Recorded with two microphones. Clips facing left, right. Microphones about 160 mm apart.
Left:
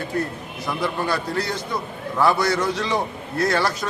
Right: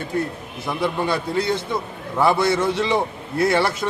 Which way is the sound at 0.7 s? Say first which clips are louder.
Right 2 dB; 25° right (ahead or behind).